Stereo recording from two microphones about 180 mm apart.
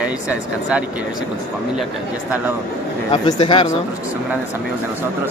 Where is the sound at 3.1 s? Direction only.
25° left (ahead or behind).